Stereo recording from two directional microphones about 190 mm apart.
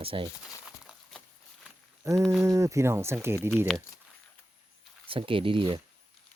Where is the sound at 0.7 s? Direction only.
5° right (ahead or behind).